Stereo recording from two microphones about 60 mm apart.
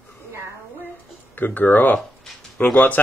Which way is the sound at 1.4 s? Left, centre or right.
Left.